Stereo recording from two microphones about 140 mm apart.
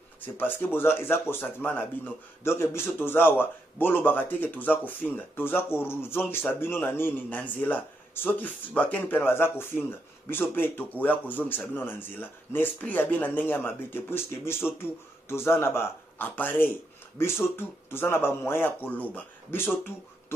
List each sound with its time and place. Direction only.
0.2 s speech: 15° left (ahead or behind)